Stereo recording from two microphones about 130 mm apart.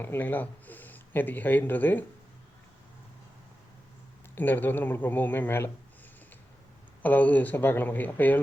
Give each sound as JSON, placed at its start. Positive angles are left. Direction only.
{"t": 0.0, "sound": "speech", "side_deg": 15}
{"t": 4.4, "sound": "speech", "side_deg": 15}
{"t": 7.0, "sound": "speech", "side_deg": 10}